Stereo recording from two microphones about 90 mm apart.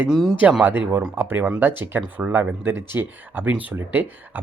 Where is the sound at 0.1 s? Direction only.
Centre (ahead or behind).